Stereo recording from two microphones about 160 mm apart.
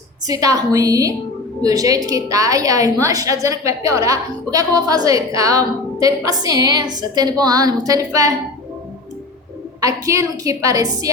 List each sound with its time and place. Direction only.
0.3 s a woman's voice: 20° right (ahead or behind)
9.8 s a woman's voice: 20° right (ahead or behind)